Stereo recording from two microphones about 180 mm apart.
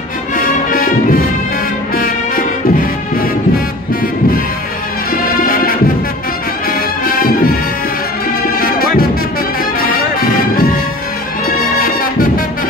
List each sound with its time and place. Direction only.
0.4 s music: 50° left (ahead or behind)
5.1 s music: 50° left (ahead or behind)
7.1 s music: 55° left (ahead or behind)
8.5 s music: 55° left (ahead or behind)